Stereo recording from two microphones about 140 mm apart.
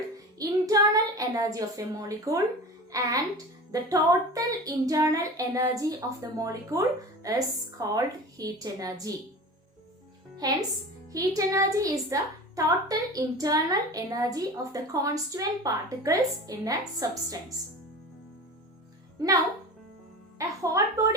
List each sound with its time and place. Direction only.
0.3 s child singing: 25° right (ahead or behind)
2.9 s a woman's voice: 25° right (ahead or behind)
10.4 s a woman's voice: 25° right (ahead or behind)
20.4 s music: 20° right (ahead or behind)